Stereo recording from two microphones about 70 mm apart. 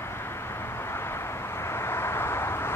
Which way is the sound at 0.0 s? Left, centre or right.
Left.